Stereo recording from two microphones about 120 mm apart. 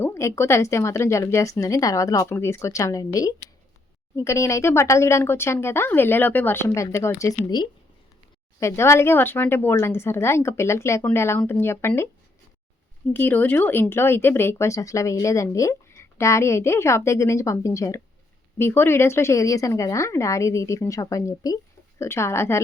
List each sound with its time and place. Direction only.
0.0 s speech: 25° left (ahead or behind)
13.1 s speech: 15° left (ahead or behind)